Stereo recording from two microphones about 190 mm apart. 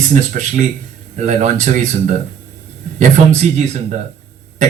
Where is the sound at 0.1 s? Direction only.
40° right (ahead or behind).